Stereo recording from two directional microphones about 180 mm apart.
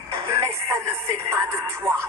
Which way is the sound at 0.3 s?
15° right (ahead or behind).